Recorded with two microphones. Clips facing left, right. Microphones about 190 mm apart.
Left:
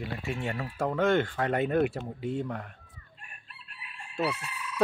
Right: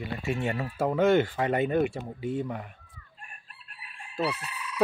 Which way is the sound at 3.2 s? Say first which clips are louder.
Right 3 dB; 45° right (ahead or behind).